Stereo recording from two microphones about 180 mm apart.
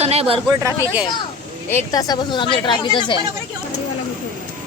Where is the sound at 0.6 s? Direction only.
15° right (ahead or behind).